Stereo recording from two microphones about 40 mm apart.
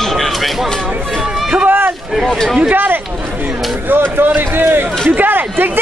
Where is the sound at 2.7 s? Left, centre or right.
Right.